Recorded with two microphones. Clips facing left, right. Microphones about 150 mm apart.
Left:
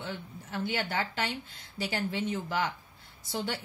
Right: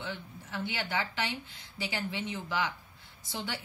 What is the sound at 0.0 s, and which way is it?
A woman's voice, 45° left (ahead or behind).